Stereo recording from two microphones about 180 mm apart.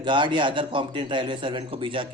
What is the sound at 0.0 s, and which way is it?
A man's voice, 25° right (ahead or behind).